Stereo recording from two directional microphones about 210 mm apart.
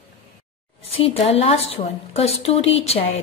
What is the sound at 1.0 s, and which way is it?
A woman's voice, 30° left (ahead or behind).